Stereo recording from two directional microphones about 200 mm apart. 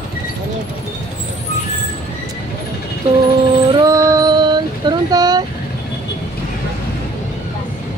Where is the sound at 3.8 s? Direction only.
15° right (ahead or behind).